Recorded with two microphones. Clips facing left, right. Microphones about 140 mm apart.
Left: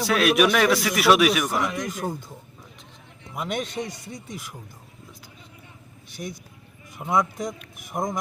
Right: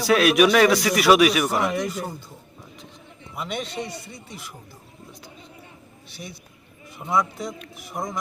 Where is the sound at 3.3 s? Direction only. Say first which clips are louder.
Left 1 dB; 45° left (ahead or behind).